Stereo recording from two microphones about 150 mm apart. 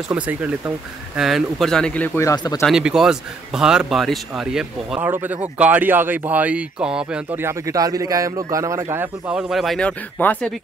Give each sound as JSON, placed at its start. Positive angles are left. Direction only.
{"t": 0.1, "sound": "speech", "side_deg": -10}
{"t": 2.1, "sound": "speech", "side_deg": 25}
{"t": 2.6, "sound": "a man's voice", "side_deg": -5}